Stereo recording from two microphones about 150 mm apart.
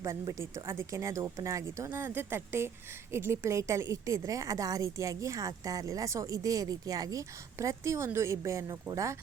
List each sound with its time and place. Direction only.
0.0 s a woman's voice: 20° right (ahead or behind)